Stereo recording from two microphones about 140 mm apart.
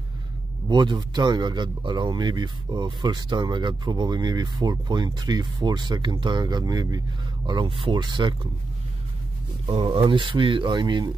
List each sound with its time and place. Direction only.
0.7 s speech: 35° right (ahead or behind)
9.7 s speech: 40° right (ahead or behind)